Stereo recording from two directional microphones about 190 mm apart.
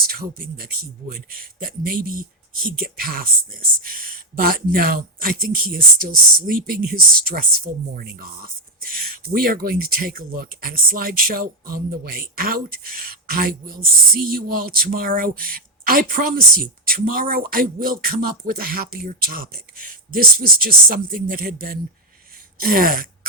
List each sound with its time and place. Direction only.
0.1 s speech: 50° right (ahead or behind)